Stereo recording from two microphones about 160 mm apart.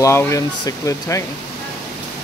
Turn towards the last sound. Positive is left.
turn(degrees=20)  # may be behind; listen again after turning